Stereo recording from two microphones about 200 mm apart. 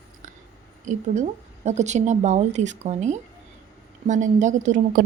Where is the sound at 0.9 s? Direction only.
35° right (ahead or behind).